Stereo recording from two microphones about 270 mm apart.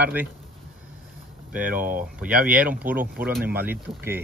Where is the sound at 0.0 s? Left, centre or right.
Centre.